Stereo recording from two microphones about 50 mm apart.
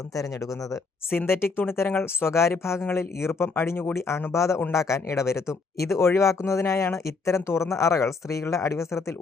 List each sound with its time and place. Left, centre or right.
1.3 s speech: left
3.9 s speech: left
4.3 s a man's voice: left
4.7 s speech: left